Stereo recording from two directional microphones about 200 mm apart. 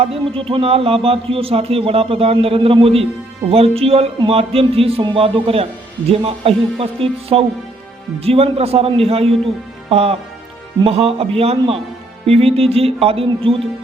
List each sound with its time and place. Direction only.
0.0 s speech: 30° right (ahead or behind)